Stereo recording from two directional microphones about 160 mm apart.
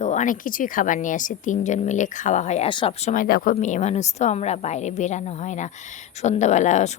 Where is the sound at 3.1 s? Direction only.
60° left (ahead or behind).